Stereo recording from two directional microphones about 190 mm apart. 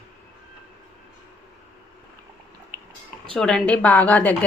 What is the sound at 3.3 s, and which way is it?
Speech, 5° left (ahead or behind).